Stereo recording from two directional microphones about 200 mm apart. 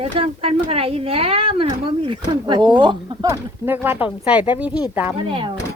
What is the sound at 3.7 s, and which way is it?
Speech, 10° right (ahead or behind).